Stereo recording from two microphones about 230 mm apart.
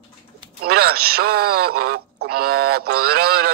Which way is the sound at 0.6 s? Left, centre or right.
Right.